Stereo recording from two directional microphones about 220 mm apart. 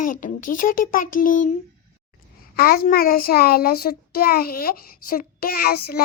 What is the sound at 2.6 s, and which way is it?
Child singing, 45° left (ahead or behind).